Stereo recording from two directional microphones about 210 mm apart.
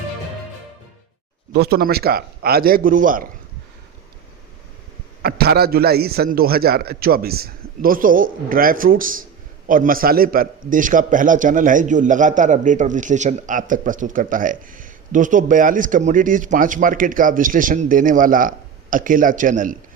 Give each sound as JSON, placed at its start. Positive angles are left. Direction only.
{"t": 1.5, "sound": "a man's voice", "side_deg": -50}
{"t": 5.2, "sound": "a man's voice", "side_deg": -50}